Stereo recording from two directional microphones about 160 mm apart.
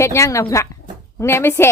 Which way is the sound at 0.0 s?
20° left (ahead or behind).